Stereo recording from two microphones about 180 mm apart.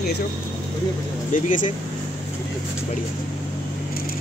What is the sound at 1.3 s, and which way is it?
Speech, 45° left (ahead or behind).